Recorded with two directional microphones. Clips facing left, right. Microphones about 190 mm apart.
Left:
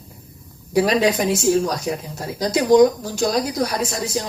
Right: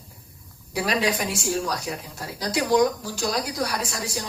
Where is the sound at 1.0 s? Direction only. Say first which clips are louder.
Left 7 dB; 20° left (ahead or behind).